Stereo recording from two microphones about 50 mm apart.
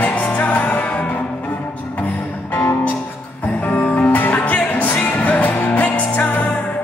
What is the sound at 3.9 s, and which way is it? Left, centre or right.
Music, left.